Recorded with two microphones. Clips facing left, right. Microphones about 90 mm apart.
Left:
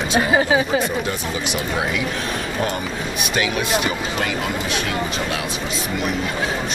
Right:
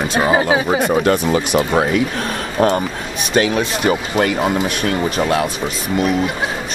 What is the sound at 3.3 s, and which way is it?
Speech, 40° right (ahead or behind).